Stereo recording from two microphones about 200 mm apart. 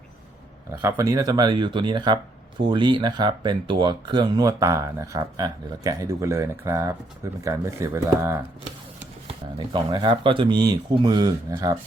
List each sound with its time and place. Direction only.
0.8 s speech: 15° right (ahead or behind)